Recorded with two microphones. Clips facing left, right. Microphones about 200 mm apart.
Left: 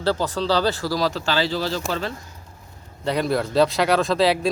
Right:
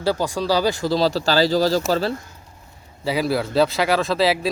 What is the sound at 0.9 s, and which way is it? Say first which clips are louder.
Speech: right 4 dB; 30° right (ahead or behind).